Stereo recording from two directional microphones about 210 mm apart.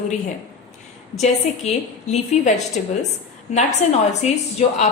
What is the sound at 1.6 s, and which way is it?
Speech, 30° left (ahead or behind).